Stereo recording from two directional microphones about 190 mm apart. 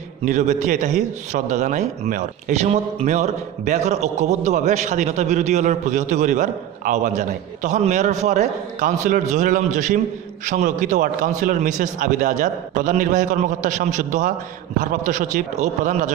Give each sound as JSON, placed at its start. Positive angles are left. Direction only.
{"t": 0.2, "sound": "a man's voice", "side_deg": -40}